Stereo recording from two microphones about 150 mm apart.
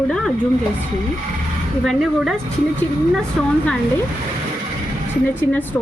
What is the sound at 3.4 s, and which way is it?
Speech, centre (ahead or behind).